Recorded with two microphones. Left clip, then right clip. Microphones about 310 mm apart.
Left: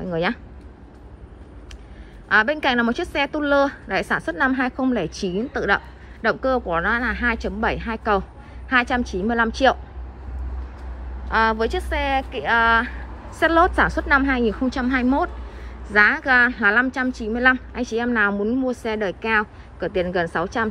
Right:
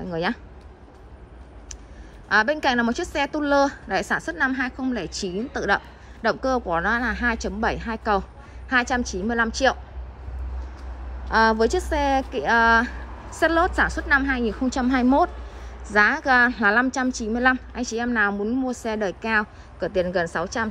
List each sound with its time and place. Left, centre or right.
0.0 s speech: centre
2.2 s a woman's voice: centre
11.2 s a woman's voice: centre